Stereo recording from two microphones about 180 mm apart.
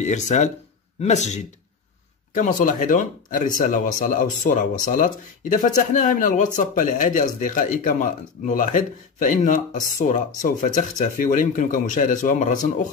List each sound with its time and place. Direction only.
0.0 s speech: 40° left (ahead or behind)